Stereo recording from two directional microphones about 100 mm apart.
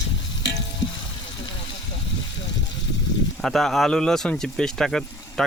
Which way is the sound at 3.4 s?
Centre (ahead or behind).